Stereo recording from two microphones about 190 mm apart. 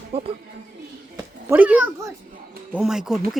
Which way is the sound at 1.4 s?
10° right (ahead or behind).